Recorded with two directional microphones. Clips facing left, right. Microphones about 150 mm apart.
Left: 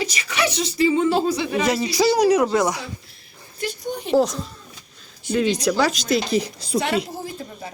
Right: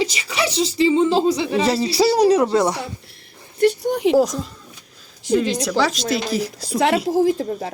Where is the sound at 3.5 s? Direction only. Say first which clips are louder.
Right 10 dB; 70° right (ahead or behind); by 4.1 s 90° right.